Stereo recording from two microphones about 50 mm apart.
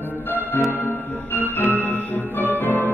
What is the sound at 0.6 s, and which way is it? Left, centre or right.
Music, left.